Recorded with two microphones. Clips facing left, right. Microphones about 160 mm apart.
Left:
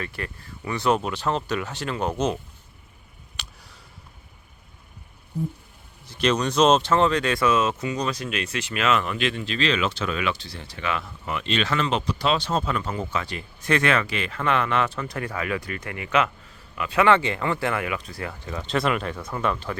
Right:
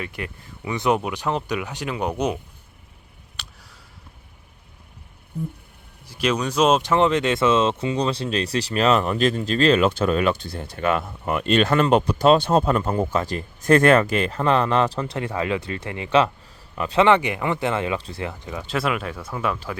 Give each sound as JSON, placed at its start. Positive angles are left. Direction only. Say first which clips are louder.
{"t": 0.0, "sound": "speech", "louder": "right 1 dB", "side_deg": -15}
{"t": 6.1, "sound": "speech", "louder": "even", "side_deg": -10}
{"t": 17.0, "sound": "speech", "louder": "right 2 dB", "side_deg": -20}